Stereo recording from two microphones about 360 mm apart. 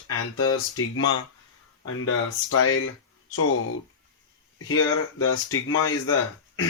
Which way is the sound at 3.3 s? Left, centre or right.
Left.